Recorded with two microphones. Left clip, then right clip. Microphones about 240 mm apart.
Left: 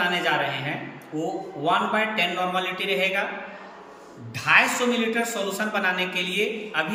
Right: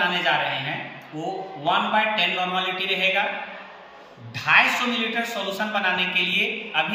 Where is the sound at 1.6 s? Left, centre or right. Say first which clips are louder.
Right 2 dB; centre.